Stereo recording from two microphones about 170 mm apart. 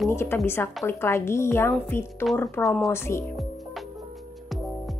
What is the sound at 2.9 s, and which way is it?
Speech, 15° left (ahead or behind).